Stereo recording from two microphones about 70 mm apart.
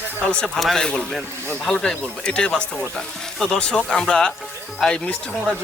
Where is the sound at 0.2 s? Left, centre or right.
Centre.